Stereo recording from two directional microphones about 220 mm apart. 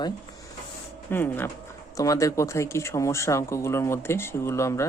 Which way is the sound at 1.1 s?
10° left (ahead or behind).